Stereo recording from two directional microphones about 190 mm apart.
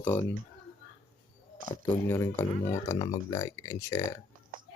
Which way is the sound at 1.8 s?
10° left (ahead or behind).